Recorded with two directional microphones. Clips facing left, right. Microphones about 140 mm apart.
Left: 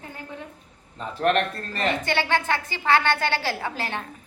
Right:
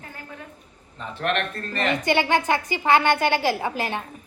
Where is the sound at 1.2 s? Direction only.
30° left (ahead or behind).